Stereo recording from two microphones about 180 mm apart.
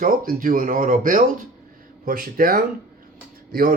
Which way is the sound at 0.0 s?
50° right (ahead or behind).